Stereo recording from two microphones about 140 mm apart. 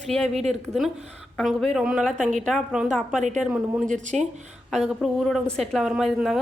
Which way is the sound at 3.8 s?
60° right (ahead or behind).